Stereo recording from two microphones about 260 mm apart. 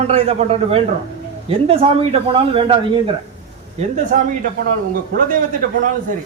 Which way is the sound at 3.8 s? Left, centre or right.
Right.